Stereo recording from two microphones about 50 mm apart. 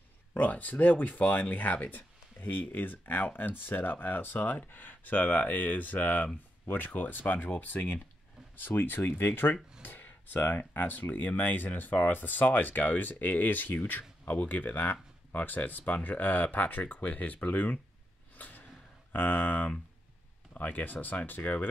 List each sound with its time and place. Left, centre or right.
0.4 s speech: left
18.3 s a sound: left
19.1 s speech: left